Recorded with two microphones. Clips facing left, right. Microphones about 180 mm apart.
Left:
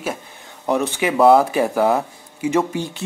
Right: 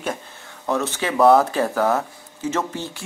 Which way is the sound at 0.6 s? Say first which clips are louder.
Left 4 dB; 15° left (ahead or behind).